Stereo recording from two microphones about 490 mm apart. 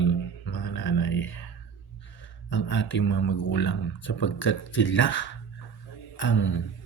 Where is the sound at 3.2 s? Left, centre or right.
Left.